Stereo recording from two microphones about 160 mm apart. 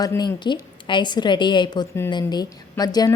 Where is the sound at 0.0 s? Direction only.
25° left (ahead or behind).